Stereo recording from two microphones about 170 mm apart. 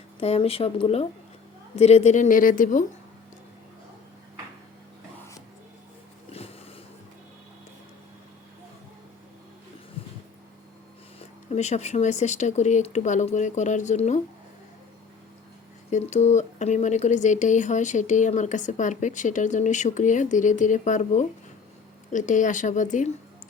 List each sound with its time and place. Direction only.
0.2 s speech: 35° left (ahead or behind); by 2.8 s 50° left (ahead or behind)
10.0 s a sound: 35° left (ahead or behind)
11.2 s speech: 40° left (ahead or behind)
15.9 s speech: 40° left (ahead or behind)